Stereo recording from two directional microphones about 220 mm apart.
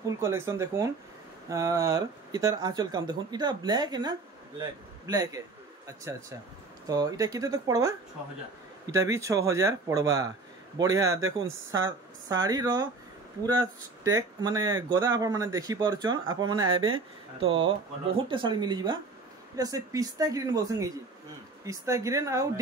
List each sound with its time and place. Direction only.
0.2 s speech: 15° right (ahead or behind)
6.9 s speech: 15° right (ahead or behind)
8.9 s speech: 15° right (ahead or behind)
16.5 s speech: 70° right (ahead or behind)
17.4 s speech: 25° right (ahead or behind)